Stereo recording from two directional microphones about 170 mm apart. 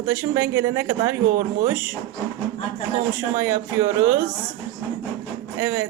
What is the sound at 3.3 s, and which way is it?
Speech, 15° right (ahead or behind).